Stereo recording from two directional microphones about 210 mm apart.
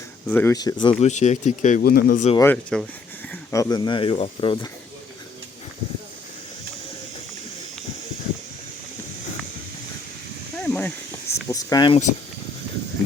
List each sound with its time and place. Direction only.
0.3 s speech: 10° left (ahead or behind)
1.0 s speech: 35° left (ahead or behind)
2.4 s speech: 5° left (ahead or behind)
3.5 s speech: 15° left (ahead or behind)
10.6 s a sound: 5° left (ahead or behind)